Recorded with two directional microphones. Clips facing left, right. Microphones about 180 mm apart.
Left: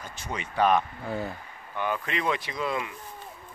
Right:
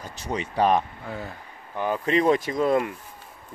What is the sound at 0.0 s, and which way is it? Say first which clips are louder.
Speech: right 5 dB; 35° right (ahead or behind).